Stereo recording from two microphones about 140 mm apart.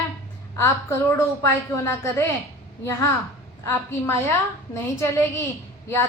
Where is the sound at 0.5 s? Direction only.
20° left (ahead or behind).